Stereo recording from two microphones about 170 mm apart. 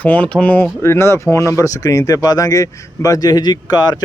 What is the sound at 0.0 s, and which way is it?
Speech, 10° left (ahead or behind).